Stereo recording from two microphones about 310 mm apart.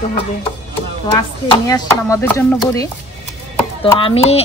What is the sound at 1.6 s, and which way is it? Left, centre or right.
Speech, centre.